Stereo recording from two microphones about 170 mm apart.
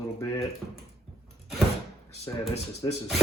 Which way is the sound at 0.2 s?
20° left (ahead or behind).